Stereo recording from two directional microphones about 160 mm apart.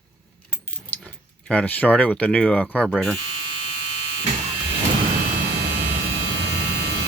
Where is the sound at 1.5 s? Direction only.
5° left (ahead or behind).